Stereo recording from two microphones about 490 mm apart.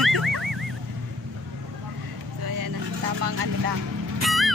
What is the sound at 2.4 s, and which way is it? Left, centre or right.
Vehicle, right.